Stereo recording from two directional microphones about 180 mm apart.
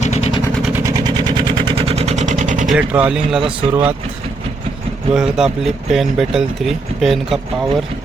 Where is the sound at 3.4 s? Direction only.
30° right (ahead or behind).